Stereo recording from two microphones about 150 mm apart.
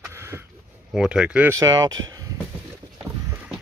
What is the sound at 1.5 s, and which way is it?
Speech, 25° right (ahead or behind).